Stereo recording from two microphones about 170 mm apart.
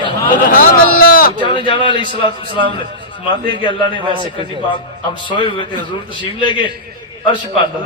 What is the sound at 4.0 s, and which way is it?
Speech, 30° right (ahead or behind).